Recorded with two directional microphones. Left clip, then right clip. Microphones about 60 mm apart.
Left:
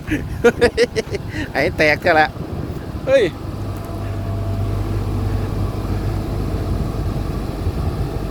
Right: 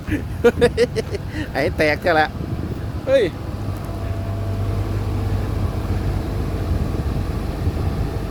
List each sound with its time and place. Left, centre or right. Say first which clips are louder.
0.1 s speech: left 1 dB; right
1.1 s speech: left 3 dB; right
3.1 s speech: left 2 dB; right